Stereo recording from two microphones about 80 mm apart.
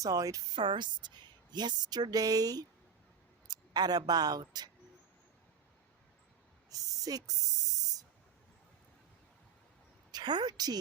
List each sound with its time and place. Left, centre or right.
0.0 s speech: right
0.5 s a woman's voice: right
6.7 s speech: right
10.1 s a woman's voice: right